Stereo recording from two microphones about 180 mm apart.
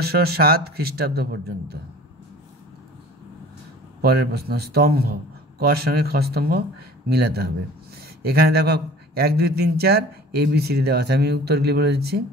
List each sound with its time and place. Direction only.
0.0 s a man's voice: 60° right (ahead or behind)
4.0 s a man's voice: 60° right (ahead or behind)